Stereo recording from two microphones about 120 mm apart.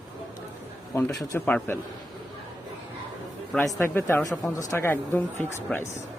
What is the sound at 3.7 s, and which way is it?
Speech, 20° left (ahead or behind).